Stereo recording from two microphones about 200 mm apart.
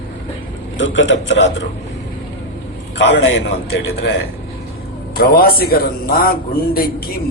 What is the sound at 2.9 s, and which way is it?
Speech, 60° left (ahead or behind).